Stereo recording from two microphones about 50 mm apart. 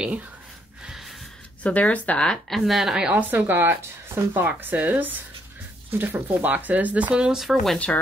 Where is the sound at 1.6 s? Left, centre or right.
Left.